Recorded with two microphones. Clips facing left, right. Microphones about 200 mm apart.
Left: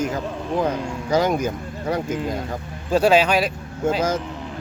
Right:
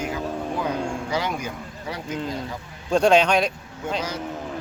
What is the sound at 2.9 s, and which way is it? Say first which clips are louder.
Speech: left 1 dB; 5° left (ahead or behind).